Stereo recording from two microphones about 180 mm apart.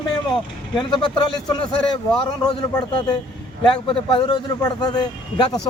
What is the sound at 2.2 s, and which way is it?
A man's voice, 25° left (ahead or behind).